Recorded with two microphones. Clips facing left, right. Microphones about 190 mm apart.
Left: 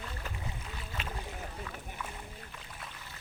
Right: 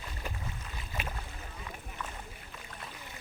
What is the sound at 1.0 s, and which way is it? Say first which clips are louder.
Boat: right 2 dB; 10° right (ahead or behind).